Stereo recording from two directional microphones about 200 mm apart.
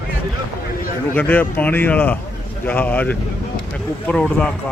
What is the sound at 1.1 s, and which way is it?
Speech, 10° left (ahead or behind).